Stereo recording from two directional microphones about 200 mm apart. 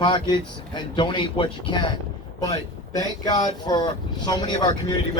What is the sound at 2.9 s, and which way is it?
Speech, 20° left (ahead or behind).